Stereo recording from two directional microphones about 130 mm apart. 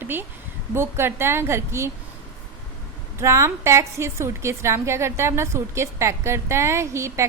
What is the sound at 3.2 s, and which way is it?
A woman's voice, 20° right (ahead or behind).